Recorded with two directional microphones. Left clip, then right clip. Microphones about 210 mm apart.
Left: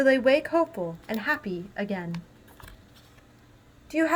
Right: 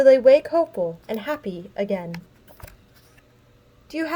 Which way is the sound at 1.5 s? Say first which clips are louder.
Right 6 dB; 50° right (ahead or behind).